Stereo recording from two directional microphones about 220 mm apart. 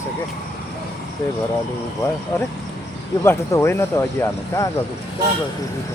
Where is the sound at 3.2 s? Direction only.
10° left (ahead or behind).